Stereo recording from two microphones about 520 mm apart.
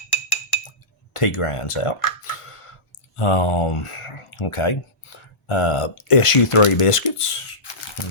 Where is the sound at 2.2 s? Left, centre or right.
Left.